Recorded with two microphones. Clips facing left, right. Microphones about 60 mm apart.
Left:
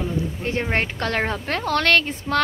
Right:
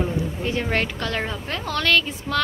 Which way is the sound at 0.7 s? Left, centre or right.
Left.